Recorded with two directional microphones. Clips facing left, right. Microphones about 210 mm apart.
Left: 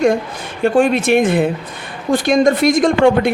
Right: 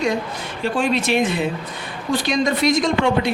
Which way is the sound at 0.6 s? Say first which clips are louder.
Left 7 dB; 50° left (ahead or behind).